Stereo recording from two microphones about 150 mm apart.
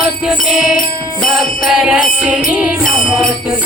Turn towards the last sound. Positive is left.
turn(degrees=0)  # may be behind; listen again after turning